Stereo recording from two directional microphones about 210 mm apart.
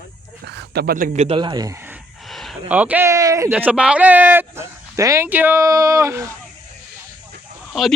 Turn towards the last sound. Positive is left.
turn(degrees=0)  # may be behind; listen again after turning